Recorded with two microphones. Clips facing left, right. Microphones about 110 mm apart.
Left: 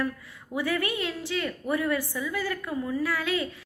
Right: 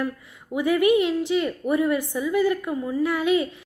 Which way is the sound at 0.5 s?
15° right (ahead or behind).